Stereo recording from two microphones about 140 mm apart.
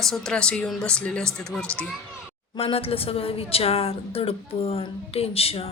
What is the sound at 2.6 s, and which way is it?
A woman's voice, 45° left (ahead or behind).